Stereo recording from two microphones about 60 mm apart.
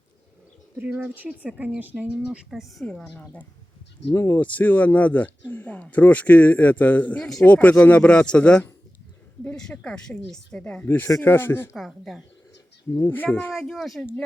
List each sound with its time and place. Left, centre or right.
0.8 s speech: right
2.5 s speech: centre
2.8 s speech: centre
4.1 s speech: left
4.4 s speech: left; by 10.6 s centre
10.8 s speech: left
11.7 s speech: centre
13.0 s speech: left
13.6 s speech: centre